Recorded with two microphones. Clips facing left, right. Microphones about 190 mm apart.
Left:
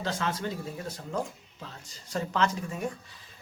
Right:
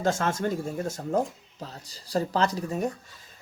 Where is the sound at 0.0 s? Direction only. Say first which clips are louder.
Right 6 dB; 45° right (ahead or behind).